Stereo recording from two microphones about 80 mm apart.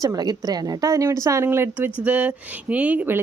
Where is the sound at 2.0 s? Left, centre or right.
Centre.